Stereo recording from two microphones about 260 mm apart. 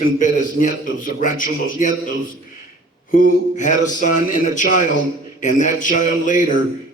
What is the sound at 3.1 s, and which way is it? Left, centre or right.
A man's voice, left.